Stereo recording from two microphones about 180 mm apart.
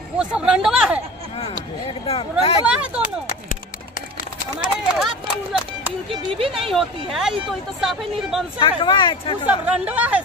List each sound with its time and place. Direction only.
0.2 s speech: 5° right (ahead or behind)
2.0 s speech: 35° left (ahead or behind)
2.6 s speech: 5° right (ahead or behind)
4.9 s run: 5° right (ahead or behind)
6.0 s speech: 30° right (ahead or behind)
6.7 s speech: centre (ahead or behind)
8.5 s speech: 30° left (ahead or behind)
9.5 s speech: 10° right (ahead or behind)